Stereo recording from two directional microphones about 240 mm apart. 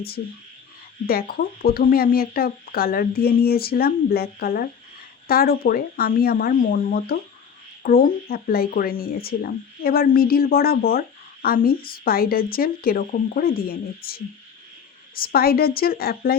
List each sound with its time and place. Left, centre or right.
1.0 s speech: left